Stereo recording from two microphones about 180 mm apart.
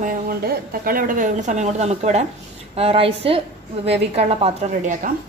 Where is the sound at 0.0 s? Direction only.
50° right (ahead or behind).